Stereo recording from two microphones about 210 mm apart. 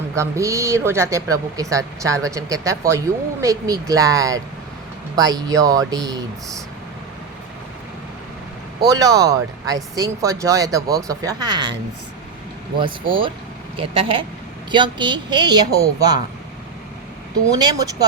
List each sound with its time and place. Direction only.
0.1 s speech: 15° right (ahead or behind)
8.9 s speech: 15° right (ahead or behind)
12.8 s a woman's voice: 25° right (ahead or behind)
17.5 s speech: 20° right (ahead or behind)